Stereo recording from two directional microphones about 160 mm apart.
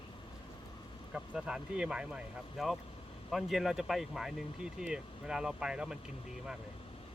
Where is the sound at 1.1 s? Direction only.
5° right (ahead or behind).